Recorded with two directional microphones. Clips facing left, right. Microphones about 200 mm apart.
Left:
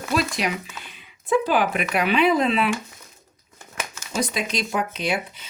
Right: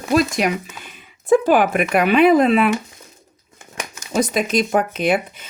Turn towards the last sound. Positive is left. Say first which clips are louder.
# right 7 dB
turn(degrees=-50)  # may be behind; listen again after turning